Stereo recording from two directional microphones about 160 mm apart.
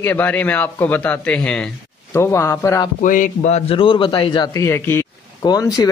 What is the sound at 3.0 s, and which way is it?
A man's voice, 55° left (ahead or behind).